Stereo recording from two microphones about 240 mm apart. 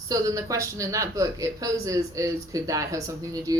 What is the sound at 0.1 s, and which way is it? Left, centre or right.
Speech, centre.